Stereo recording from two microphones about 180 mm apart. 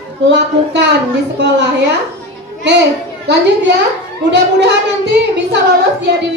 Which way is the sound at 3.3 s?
70° right (ahead or behind).